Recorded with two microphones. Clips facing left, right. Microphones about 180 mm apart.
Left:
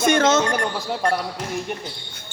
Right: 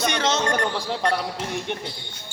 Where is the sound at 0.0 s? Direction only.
50° left (ahead or behind).